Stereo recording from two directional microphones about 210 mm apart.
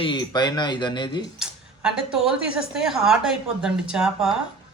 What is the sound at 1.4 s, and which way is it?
Speech, 5° right (ahead or behind).